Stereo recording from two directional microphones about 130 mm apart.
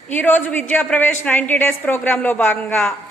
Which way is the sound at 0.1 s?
15° left (ahead or behind).